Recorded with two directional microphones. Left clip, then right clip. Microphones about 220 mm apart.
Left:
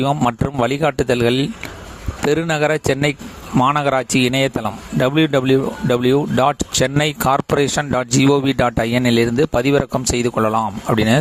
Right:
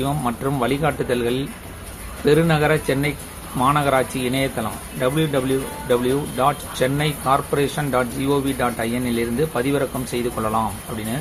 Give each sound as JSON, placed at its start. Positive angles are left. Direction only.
{"t": 0.0, "sound": "speech", "side_deg": 50}